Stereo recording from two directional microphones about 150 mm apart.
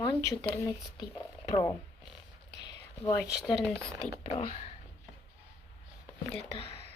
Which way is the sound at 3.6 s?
5° left (ahead or behind).